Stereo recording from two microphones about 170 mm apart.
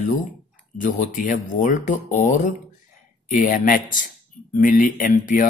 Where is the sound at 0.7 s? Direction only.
50° left (ahead or behind).